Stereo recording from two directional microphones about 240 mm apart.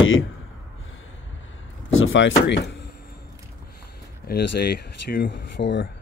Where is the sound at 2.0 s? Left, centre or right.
Left.